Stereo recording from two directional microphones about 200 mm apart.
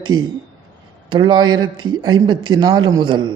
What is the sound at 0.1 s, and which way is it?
Speech, 20° right (ahead or behind).